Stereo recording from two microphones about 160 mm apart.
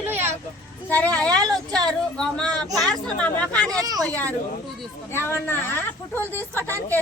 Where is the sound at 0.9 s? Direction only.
10° left (ahead or behind).